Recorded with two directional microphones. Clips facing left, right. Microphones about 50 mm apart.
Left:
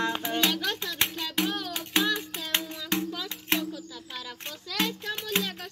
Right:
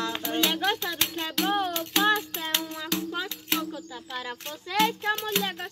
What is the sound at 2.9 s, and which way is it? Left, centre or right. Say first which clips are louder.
Music: left 2 dB; left.